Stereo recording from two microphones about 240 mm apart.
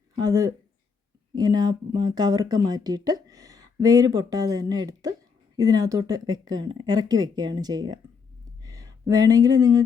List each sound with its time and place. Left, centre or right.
0.2 s speech: centre